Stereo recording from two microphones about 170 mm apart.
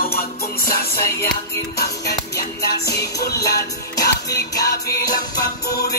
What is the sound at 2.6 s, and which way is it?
Music, 75° left (ahead or behind).